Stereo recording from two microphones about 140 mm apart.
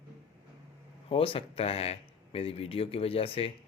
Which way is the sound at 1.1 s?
40° left (ahead or behind).